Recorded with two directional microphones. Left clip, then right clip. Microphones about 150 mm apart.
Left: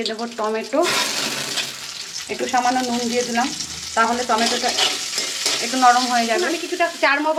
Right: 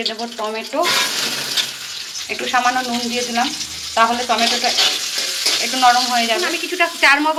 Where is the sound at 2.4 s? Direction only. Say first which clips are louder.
Right 2 dB; 30° left (ahead or behind).